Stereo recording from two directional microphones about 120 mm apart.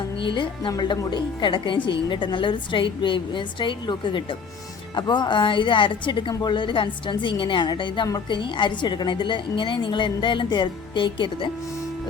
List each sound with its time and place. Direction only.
0.2 s a woman's voice: 45° left (ahead or behind)